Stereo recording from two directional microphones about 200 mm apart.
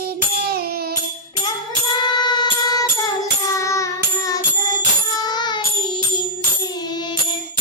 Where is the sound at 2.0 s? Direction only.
20° left (ahead or behind).